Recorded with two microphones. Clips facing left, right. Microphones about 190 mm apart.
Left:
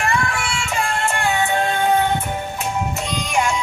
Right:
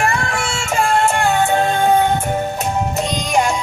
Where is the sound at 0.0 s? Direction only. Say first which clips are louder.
Right 2 dB; 45° right (ahead or behind).